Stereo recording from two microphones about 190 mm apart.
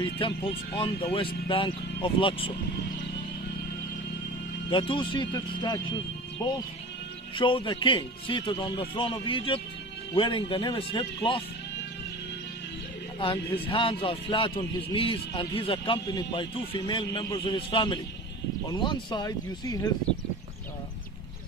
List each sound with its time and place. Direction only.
0.0 s a man's voice: 25° left (ahead or behind)
4.6 s a man's voice: 25° left (ahead or behind)
13.2 s a man's voice: 30° left (ahead or behind)